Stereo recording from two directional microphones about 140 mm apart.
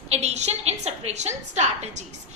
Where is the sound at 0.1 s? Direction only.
50° right (ahead or behind).